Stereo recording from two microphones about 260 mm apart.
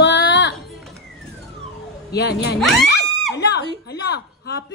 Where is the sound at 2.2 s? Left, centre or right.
Left.